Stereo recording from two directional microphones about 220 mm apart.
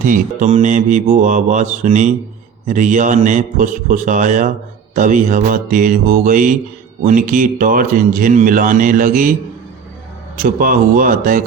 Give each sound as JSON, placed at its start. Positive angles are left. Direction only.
{"t": 0.0, "sound": "speech", "side_deg": -35}
{"t": 10.3, "sound": "speech", "side_deg": -40}